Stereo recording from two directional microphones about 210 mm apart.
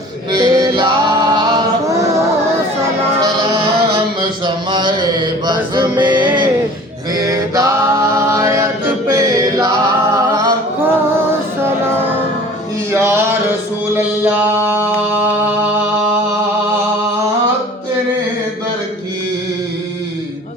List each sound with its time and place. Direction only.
0.3 s singing: 20° right (ahead or behind)
3.2 s music: 15° right (ahead or behind)
4.2 s mantra: 20° right (ahead or behind)
7.2 s music: 15° right (ahead or behind)
12.9 s a sound: 10° right (ahead or behind)